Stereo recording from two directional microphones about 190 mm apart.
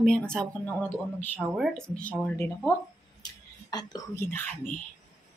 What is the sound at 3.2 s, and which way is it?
Whispering, 20° left (ahead or behind).